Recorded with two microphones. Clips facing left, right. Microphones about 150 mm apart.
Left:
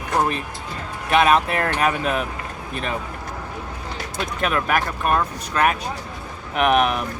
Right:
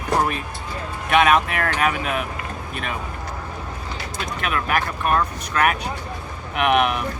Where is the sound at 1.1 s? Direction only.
35° left (ahead or behind).